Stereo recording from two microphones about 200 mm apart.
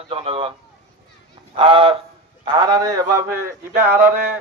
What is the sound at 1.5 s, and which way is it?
A man's voice, 25° right (ahead or behind).